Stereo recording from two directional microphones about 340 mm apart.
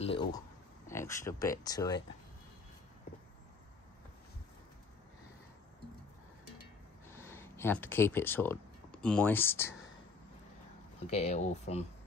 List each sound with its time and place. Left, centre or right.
0.0 s speech: centre
7.2 s speech: centre
11.1 s speech: centre